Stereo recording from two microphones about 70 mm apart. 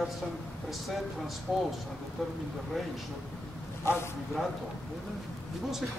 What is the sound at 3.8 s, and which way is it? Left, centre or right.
Speech, left.